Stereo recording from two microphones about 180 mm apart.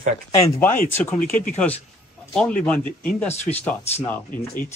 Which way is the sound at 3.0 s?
10° left (ahead or behind).